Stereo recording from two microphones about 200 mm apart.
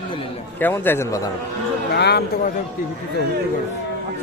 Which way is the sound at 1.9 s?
55° left (ahead or behind).